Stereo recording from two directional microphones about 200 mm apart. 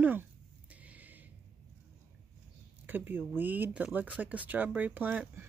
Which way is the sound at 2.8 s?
10° right (ahead or behind).